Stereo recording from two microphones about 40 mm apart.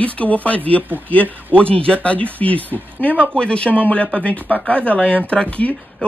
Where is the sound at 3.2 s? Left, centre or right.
Left.